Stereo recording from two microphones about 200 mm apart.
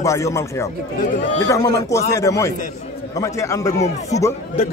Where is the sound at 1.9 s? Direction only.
15° left (ahead or behind).